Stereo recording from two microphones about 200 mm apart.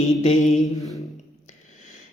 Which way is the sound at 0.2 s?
40° left (ahead or behind).